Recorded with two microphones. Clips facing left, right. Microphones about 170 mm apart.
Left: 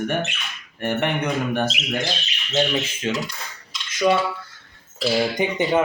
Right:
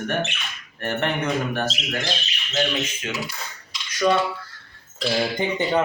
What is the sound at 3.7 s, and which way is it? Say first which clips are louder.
Cutlery: left 1 dB; centre (ahead or behind).